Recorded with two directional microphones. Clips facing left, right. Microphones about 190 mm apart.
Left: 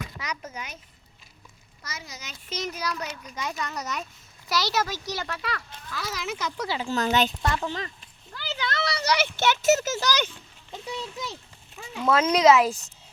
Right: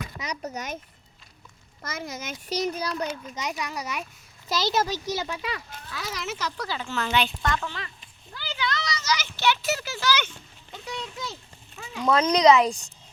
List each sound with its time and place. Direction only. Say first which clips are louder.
0.3 s a child's voice: right 7 dB; 40° right (ahead or behind)
1.8 s speech: right 7 dB; 50° right (ahead or behind)
2.5 s a child's voice: right 4 dB; 35° right (ahead or behind)
3.3 s speech: right 1 dB; 15° right (ahead or behind)
4.4 s a child's voice: right 1 dB; 25° right (ahead or behind)
5.1 s speech: right 2 dB; 10° right (ahead or behind)
6.6 s a child's voice: left 3 dB; 20° left (ahead or behind)
6.9 s speech: left 2 dB; 40° left (ahead or behind)
7.4 s a child's voice: left 1 dB; 30° left (ahead or behind)
8.5 s a sound: left 1 dB; 50° left (ahead or behind)
10.8 s a child's voice: left 1 dB; 20° left (ahead or behind)
11.9 s speech: even; 5° left (ahead or behind)